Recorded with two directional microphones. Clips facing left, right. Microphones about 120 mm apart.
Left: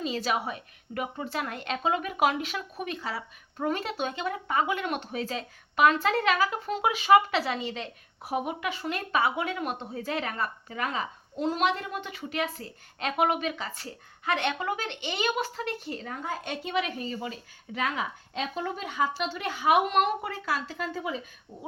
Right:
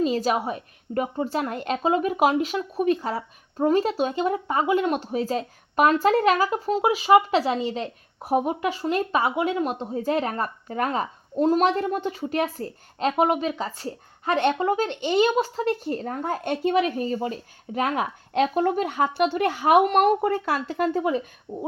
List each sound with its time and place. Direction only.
0.0 s speech: 45° right (ahead or behind)
9.0 s speech: 20° right (ahead or behind)
10.0 s speech: 40° right (ahead or behind)
13.8 s speech: 40° right (ahead or behind)
14.6 s speech: 30° right (ahead or behind)
14.8 s speech: 40° right (ahead or behind)
15.2 s speech: 30° right (ahead or behind)
15.9 s speech: 45° right (ahead or behind)